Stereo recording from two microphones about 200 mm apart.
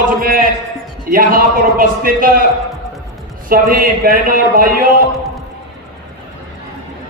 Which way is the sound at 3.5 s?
45° right (ahead or behind).